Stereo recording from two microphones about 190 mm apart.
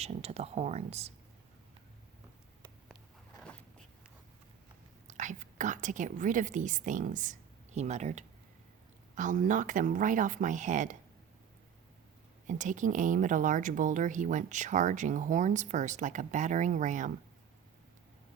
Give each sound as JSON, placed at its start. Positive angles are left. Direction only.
{"t": 0.0, "sound": "speech", "side_deg": -35}
{"t": 2.9, "sound": "a sound", "side_deg": 5}
{"t": 5.0, "sound": "a woman's voice", "side_deg": -40}
{"t": 12.5, "sound": "speech", "side_deg": -40}